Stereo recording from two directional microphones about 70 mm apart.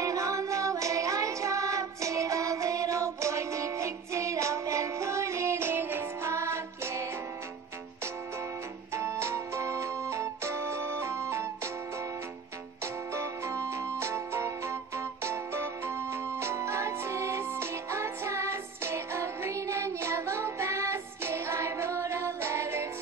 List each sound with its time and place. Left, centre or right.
0.0 s music: right
8.9 s music: right
12.8 s music: right